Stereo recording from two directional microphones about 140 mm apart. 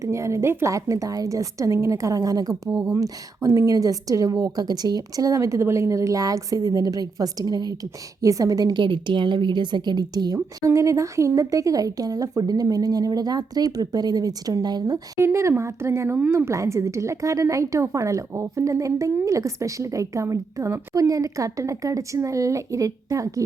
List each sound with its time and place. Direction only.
0.0 s a woman's voice: 20° right (ahead or behind)